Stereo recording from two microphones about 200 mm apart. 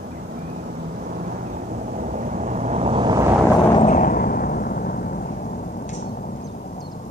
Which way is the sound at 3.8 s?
40° left (ahead or behind).